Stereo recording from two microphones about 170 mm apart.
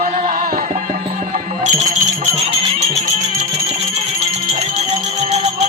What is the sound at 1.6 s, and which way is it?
Music, 40° right (ahead or behind).